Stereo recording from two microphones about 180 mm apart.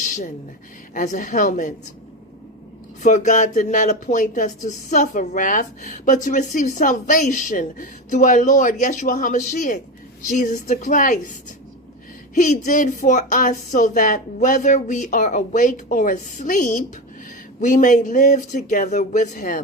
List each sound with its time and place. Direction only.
0.0 s a sound: 45° left (ahead or behind)
0.9 s speech: 45° left (ahead or behind)
3.0 s speech: 45° left (ahead or behind)